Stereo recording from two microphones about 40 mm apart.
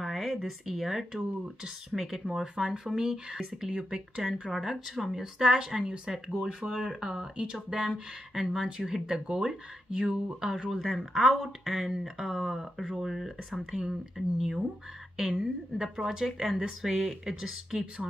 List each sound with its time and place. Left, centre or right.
0.0 s speech: centre
4.2 s speech: centre; by 10.5 s right
11.1 s speech: centre
12.8 s speech: centre
13.1 s speech: centre